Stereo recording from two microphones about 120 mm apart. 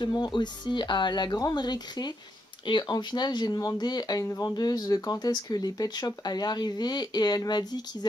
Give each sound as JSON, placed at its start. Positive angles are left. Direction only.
{"t": 0.0, "sound": "speech", "side_deg": 40}